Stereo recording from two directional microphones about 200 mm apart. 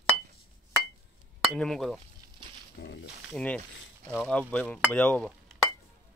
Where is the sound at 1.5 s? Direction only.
Centre (ahead or behind).